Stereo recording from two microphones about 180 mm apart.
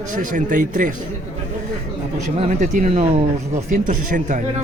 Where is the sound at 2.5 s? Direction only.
45° right (ahead or behind).